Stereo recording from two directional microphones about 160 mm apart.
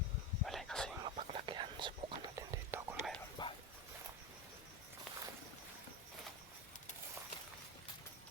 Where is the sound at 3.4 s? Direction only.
25° left (ahead or behind).